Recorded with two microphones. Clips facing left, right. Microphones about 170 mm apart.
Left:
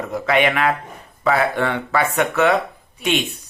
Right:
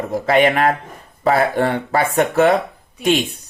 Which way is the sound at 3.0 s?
50° right (ahead or behind).